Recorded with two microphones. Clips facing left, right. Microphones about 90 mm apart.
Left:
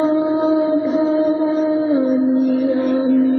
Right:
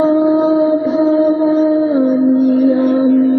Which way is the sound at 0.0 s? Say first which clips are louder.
Right 5 dB; centre (ahead or behind).